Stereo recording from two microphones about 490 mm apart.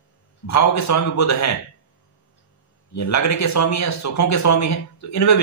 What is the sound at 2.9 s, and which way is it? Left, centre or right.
A man's voice, left.